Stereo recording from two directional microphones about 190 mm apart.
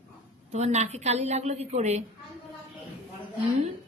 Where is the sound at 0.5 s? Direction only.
35° right (ahead or behind).